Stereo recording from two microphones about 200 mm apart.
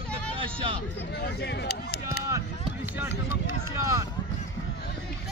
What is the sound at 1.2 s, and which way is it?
Speech, 55° left (ahead or behind).